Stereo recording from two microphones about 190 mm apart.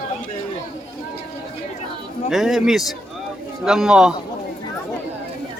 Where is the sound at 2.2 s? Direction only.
Centre (ahead or behind).